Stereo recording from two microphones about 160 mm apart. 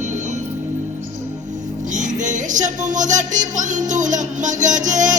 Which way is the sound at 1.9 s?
50° right (ahead or behind).